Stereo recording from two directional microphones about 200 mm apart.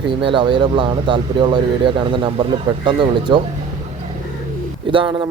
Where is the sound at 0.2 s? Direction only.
25° right (ahead or behind).